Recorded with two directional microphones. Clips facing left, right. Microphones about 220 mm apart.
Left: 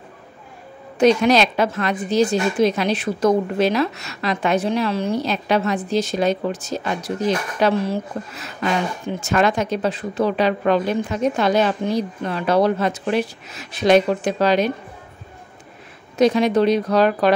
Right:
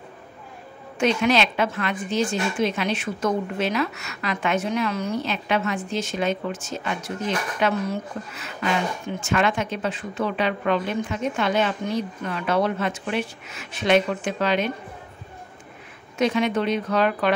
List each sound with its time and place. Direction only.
0.9 s a woman's voice: 40° left (ahead or behind)
16.2 s a woman's voice: 35° left (ahead or behind)